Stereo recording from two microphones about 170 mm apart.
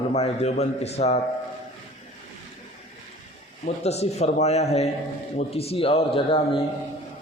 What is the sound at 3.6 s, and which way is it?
A man's voice, 40° left (ahead or behind).